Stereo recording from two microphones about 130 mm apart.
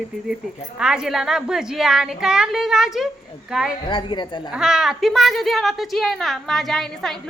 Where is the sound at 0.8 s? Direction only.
5° right (ahead or behind).